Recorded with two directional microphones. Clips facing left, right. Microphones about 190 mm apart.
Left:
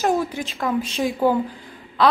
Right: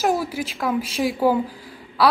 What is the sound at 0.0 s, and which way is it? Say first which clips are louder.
A woman's voice: left 1 dB; 5° right (ahead or behind).